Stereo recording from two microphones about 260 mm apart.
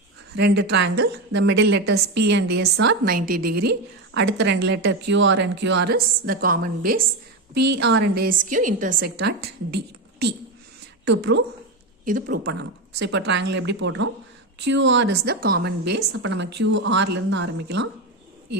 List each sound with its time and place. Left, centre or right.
0.3 s a woman's voice: right
12.0 s a woman's voice: right